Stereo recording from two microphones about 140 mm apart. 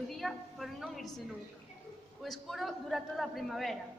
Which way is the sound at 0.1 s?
Centre (ahead or behind).